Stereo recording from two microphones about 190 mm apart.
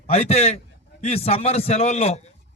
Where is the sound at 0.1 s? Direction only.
35° left (ahead or behind).